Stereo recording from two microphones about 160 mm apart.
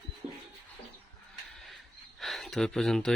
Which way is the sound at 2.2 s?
Centre (ahead or behind).